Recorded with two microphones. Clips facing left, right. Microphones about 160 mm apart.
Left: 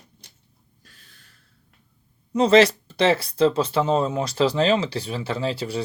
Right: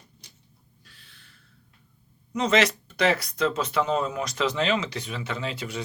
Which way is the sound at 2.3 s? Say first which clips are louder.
Left 7 dB; 30° left (ahead or behind).